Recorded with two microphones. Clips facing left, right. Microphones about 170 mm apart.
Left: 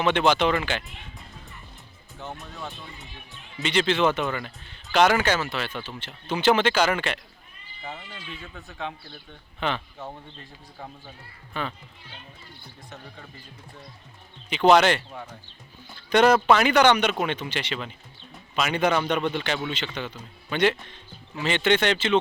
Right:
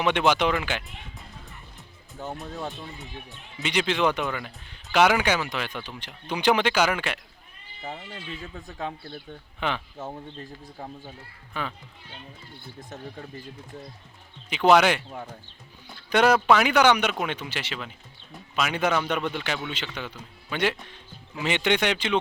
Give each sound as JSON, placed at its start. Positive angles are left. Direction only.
{"t": 0.0, "sound": "a man's voice", "side_deg": -10}
{"t": 2.1, "sound": "a man's voice", "side_deg": -20}
{"t": 7.9, "sound": "speech", "side_deg": -35}
{"t": 9.6, "sound": "a man's voice", "side_deg": -10}
{"t": 11.6, "sound": "a man's voice", "side_deg": -10}
{"t": 14.5, "sound": "a man's voice", "side_deg": -10}